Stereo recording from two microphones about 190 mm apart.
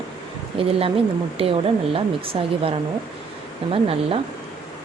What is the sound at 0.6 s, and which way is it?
Speech, 30° right (ahead or behind).